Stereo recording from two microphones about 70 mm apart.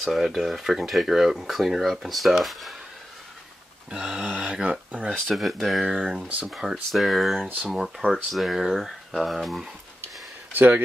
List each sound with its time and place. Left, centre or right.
0.0 s speech: centre
3.9 s speech: centre
5.3 s speech: centre
5.9 s speech: centre
6.5 s speech: centre
10.5 s speech: right